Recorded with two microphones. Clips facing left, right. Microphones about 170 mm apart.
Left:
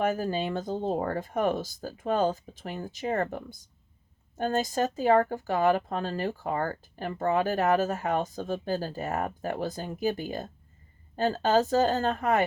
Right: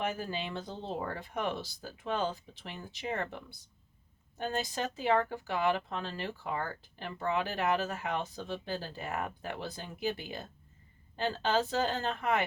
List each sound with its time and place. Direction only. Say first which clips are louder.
0.0 s speech: left 8 dB; 45° left (ahead or behind)